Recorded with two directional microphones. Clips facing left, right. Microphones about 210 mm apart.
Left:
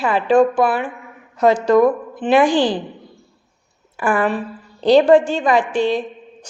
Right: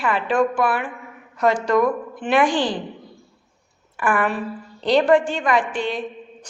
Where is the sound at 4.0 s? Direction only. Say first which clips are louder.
Left 3 dB; 30° left (ahead or behind).